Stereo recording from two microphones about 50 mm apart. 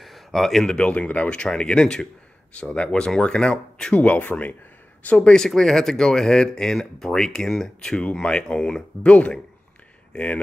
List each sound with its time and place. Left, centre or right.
0.0 s a sound: centre
0.7 s speech: left
3.9 s speech: left
5.0 s speech: left